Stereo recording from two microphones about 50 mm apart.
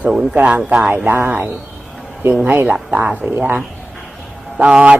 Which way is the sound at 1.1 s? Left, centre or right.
Right.